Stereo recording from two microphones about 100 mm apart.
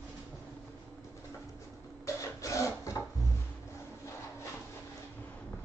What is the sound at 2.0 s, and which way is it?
Filing, 30° left (ahead or behind).